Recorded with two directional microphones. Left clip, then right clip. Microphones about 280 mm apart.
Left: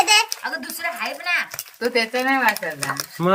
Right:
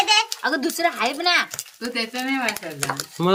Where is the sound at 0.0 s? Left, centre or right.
Left.